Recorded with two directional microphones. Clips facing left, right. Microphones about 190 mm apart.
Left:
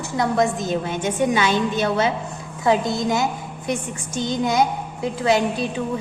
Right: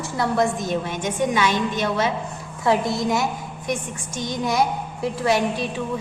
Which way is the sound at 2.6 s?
20° left (ahead or behind).